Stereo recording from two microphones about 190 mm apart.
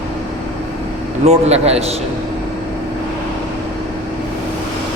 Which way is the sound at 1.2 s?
35° right (ahead or behind).